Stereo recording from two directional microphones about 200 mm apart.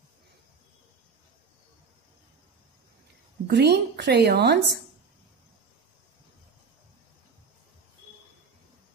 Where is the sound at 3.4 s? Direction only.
55° right (ahead or behind).